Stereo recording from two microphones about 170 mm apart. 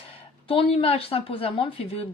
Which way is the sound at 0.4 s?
35° left (ahead or behind).